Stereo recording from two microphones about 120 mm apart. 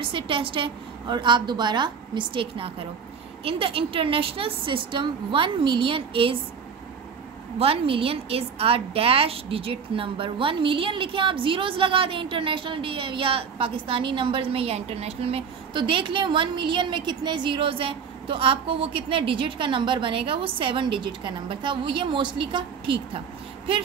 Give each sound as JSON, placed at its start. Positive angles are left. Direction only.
{"t": 0.0, "sound": "a woman's voice", "side_deg": -45}
{"t": 7.5, "sound": "a woman's voice", "side_deg": -55}